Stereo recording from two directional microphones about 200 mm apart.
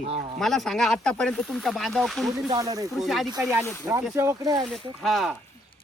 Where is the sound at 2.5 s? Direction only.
15° right (ahead or behind).